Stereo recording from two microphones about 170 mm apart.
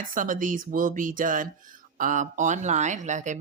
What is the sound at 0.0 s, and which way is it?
Speech, 50° right (ahead or behind).